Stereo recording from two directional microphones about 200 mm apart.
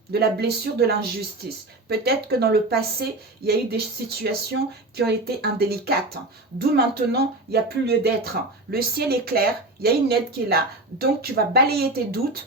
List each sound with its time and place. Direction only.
0.1 s speech: 50° right (ahead or behind)